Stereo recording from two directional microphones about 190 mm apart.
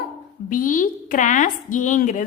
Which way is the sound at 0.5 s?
45° left (ahead or behind).